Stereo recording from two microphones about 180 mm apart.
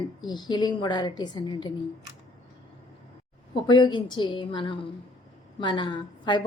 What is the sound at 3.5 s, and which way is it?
A woman's voice, 25° left (ahead or behind).